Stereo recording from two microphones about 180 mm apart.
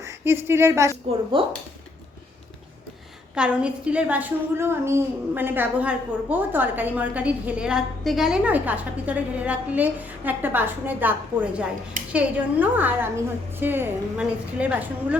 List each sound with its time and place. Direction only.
0.0 s speech: 15° right (ahead or behind)
1.4 s speech: 30° right (ahead or behind)
3.3 s a woman's voice: 5° right (ahead or behind)